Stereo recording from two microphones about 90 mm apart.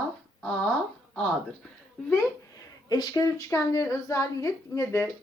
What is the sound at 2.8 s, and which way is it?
A woman's voice, 45° left (ahead or behind).